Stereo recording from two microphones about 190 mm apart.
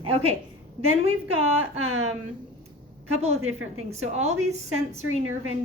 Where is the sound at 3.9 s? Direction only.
35° right (ahead or behind).